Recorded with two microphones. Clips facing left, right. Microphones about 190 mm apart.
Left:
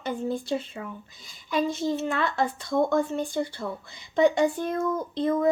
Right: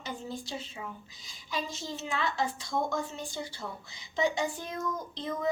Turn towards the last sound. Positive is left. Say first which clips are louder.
# left 10 dB
turn(degrees=55)  # may be behind; listen again after turning